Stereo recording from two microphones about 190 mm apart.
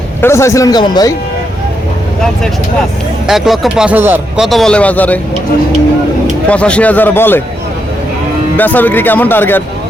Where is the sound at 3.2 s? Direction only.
Centre (ahead or behind).